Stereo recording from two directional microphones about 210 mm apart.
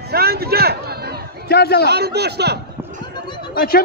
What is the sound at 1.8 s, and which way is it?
Speech, 50° right (ahead or behind).